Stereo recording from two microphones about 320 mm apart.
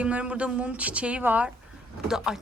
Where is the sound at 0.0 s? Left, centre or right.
Centre.